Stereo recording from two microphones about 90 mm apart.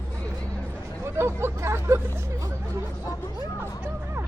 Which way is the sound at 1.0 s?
30° right (ahead or behind).